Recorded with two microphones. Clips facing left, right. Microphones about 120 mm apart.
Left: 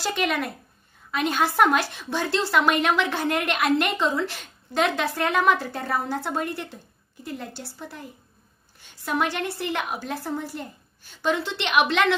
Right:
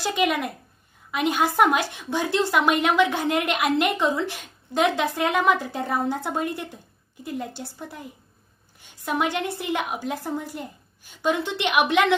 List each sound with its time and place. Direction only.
0.0 s a woman's voice: 15° right (ahead or behind)